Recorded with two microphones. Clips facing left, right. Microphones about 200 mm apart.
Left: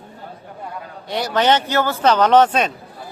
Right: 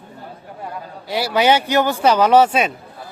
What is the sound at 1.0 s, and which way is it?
A man's voice, 5° right (ahead or behind).